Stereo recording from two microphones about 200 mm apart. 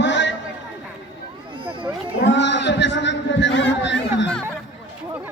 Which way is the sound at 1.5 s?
25° right (ahead or behind).